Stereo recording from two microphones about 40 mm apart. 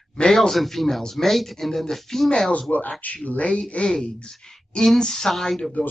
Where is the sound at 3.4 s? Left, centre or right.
Left; by 5.6 s centre.